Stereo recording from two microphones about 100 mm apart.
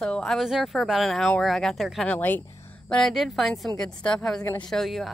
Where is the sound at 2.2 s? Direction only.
20° left (ahead or behind).